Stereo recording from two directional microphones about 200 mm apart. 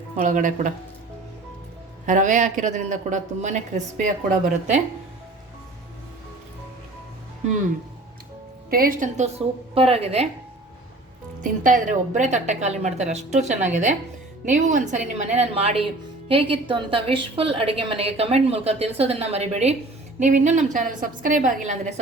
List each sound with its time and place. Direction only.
0.2 s a woman's voice: 40° right (ahead or behind)
2.0 s a woman's voice: 40° right (ahead or behind)
8.7 s a woman's voice: 45° right (ahead or behind)
11.4 s a woman's voice: 40° right (ahead or behind)